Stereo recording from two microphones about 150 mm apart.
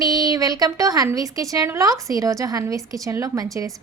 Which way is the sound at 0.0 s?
25° right (ahead or behind).